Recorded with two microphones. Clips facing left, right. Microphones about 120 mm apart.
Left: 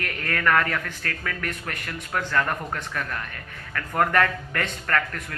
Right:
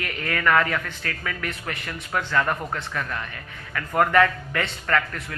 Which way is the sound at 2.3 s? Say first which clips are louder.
Right 2 dB; 20° right (ahead or behind).